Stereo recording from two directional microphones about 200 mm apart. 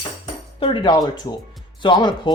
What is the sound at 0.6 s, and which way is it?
Speech, 25° left (ahead or behind).